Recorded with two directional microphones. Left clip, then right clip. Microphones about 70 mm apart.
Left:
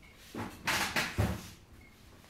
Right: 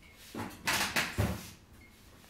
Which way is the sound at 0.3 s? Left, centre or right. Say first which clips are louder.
Even; right.